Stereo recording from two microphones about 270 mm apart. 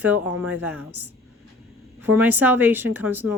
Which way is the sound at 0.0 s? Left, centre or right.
Centre.